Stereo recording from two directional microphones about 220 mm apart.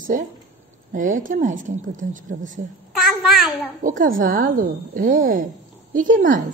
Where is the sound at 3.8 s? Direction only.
40° right (ahead or behind).